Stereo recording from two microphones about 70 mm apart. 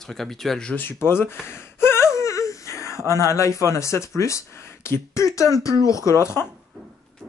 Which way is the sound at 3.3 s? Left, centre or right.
Left.